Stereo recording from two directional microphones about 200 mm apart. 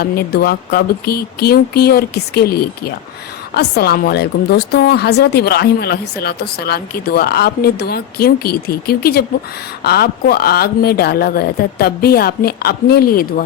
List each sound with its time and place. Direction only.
0.0 s a woman's voice: 50° left (ahead or behind)